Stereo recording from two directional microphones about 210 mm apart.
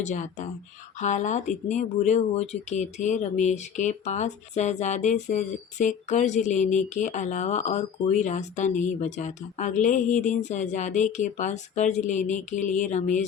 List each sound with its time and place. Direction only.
0.0 s speech: 35° left (ahead or behind)